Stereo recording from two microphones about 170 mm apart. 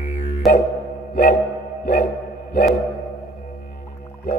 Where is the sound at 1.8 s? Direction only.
55° left (ahead or behind).